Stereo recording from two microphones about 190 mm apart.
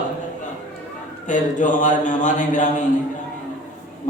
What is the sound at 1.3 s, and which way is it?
A man's voice, 40° left (ahead or behind).